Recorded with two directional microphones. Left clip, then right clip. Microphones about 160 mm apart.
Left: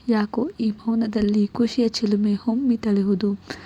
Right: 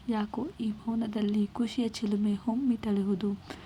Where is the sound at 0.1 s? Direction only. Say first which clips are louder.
Left 10 dB; 35° left (ahead or behind).